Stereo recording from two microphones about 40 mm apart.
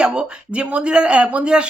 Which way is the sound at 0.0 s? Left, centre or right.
Right.